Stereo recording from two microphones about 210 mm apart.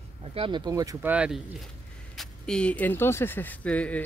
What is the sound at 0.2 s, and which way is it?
Speech, 30° right (ahead or behind).